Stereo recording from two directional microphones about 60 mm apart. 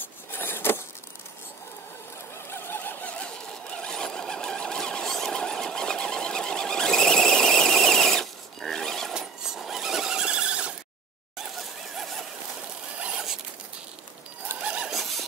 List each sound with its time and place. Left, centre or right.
0.3 s a sound: left
2.5 s mechanisms: left
3.1 s sewing machine: centre
9.1 s squeal: centre
11.3 s a sound: centre
14.6 s neigh: centre
14.9 s squeal: centre